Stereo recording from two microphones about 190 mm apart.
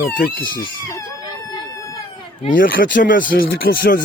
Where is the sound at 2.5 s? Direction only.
45° left (ahead or behind).